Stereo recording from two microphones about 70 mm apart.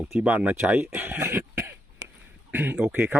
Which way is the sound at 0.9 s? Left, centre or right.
Right.